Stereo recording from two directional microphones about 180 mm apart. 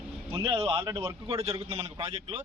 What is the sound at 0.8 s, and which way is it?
Speech, 15° right (ahead or behind).